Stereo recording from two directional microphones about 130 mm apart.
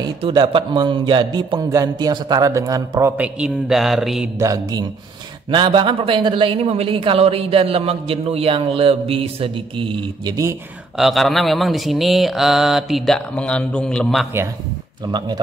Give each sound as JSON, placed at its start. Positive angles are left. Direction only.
{"t": 0.2, "sound": "speech", "side_deg": -40}
{"t": 3.3, "sound": "speech", "side_deg": -5}
{"t": 4.4, "sound": "speech", "side_deg": -25}
{"t": 5.5, "sound": "speech", "side_deg": -40}
{"t": 11.0, "sound": "speech", "side_deg": 0}
{"t": 15.0, "sound": "speech", "side_deg": -30}